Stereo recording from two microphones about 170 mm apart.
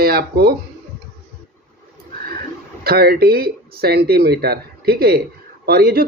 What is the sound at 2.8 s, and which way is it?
Speech, 65° right (ahead or behind).